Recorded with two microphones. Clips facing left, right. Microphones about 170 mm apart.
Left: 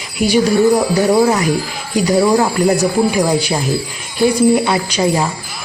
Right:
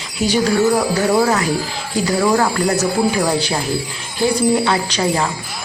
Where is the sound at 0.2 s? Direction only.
10° left (ahead or behind).